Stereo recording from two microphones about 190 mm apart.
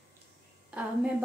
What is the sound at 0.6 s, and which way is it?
Speech, 5° right (ahead or behind).